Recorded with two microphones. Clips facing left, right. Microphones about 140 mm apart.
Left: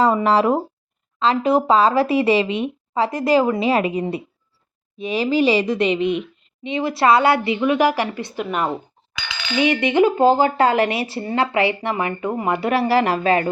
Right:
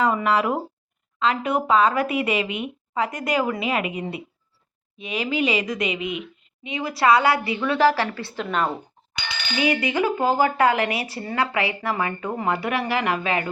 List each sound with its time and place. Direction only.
0.0 s speech: 35° left (ahead or behind); by 8.7 s 10° left (ahead or behind)
9.6 s speech: 25° left (ahead or behind)